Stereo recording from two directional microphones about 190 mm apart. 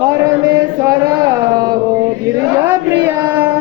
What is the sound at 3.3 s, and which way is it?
Child singing, 10° right (ahead or behind).